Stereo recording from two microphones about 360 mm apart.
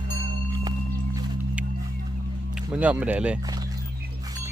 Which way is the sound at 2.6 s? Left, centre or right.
Centre.